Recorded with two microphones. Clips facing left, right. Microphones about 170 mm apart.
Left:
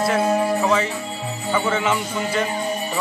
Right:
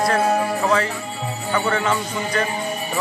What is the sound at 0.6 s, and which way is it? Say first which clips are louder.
A man's voice: even; 15° left (ahead or behind).